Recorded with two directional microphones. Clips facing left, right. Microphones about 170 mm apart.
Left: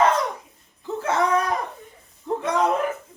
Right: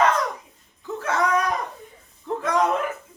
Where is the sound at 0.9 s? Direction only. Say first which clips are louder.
Left 1 dB; 30° left (ahead or behind).